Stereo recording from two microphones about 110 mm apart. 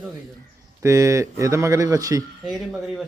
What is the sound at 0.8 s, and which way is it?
Speech, 25° right (ahead or behind).